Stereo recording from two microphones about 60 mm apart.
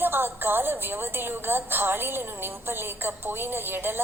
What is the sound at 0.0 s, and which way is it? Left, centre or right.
A woman's voice, right.